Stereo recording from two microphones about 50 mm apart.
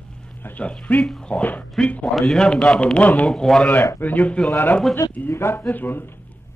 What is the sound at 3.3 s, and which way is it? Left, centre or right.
Speech, centre.